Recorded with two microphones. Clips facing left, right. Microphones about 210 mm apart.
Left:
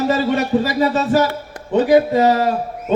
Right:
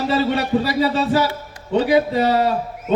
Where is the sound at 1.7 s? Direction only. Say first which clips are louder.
Left 3 dB; 50° left (ahead or behind).